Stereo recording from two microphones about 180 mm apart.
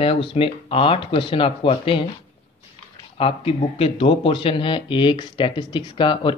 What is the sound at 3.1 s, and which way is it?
Speech, 30° left (ahead or behind).